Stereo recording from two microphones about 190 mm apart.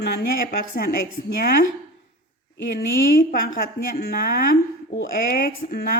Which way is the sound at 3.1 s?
50° left (ahead or behind).